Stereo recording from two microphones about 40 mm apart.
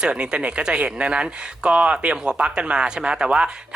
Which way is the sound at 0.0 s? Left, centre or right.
Right.